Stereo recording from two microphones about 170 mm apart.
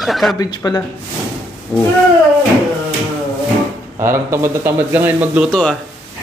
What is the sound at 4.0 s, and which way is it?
Speech, 15° right (ahead or behind).